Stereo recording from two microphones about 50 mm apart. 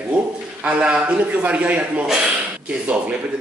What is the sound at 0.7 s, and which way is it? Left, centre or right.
A man's voice, right.